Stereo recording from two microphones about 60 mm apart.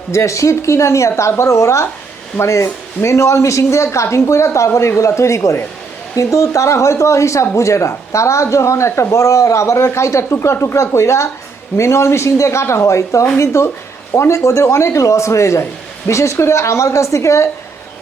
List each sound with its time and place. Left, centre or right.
0.1 s a woman's voice: left